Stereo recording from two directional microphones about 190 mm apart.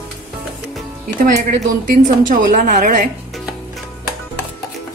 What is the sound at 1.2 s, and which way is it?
A woman's voice, 45° right (ahead or behind).